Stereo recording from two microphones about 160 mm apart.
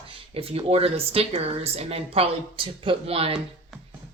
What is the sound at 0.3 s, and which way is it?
Speech, 35° right (ahead or behind).